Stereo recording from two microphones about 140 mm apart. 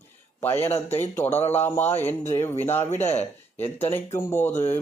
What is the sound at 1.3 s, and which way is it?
Speech, 50° left (ahead or behind).